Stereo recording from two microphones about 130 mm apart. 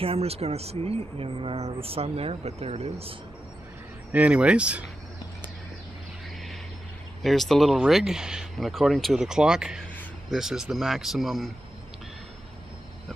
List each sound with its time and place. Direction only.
0.0 s speech: 50° right (ahead or behind)
4.1 s speech: 10° right (ahead or behind)
7.2 s speech: centre (ahead or behind)